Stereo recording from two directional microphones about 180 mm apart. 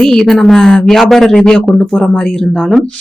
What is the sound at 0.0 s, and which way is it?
A woman's voice, centre (ahead or behind).